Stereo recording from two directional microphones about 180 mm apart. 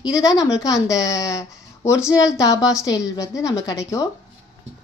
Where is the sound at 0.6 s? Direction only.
20° left (ahead or behind).